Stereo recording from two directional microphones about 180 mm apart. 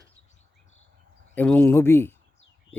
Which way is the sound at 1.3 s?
10° left (ahead or behind).